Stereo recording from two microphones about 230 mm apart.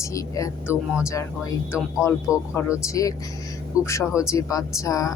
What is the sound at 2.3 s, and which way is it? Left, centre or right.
Speech, centre.